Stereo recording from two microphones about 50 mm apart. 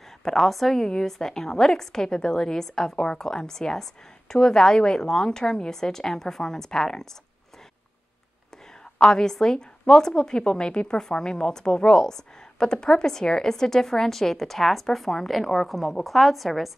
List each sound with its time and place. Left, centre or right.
0.2 s a woman's voice: centre
8.9 s a woman's voice: centre